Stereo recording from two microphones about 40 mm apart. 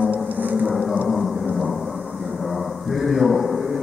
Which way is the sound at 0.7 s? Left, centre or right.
Centre.